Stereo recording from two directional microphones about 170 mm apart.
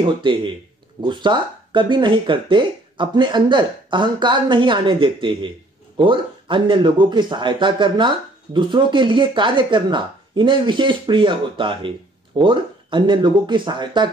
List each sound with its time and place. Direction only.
0.0 s speech: 30° right (ahead or behind)